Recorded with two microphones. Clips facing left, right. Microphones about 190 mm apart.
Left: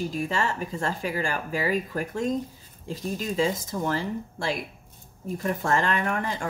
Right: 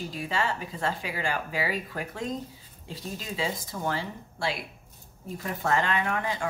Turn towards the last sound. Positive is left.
turn(degrees=45)  # may be behind; listen again after turning